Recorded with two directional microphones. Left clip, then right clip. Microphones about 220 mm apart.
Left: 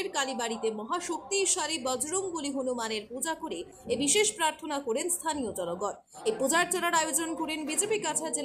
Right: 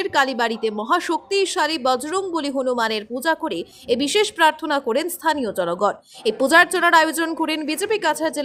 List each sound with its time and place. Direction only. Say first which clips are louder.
0.0 s a woman's voice: right 12 dB; 30° right (ahead or behind)